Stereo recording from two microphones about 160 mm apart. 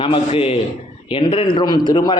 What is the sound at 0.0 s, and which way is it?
A man's voice, 35° left (ahead or behind).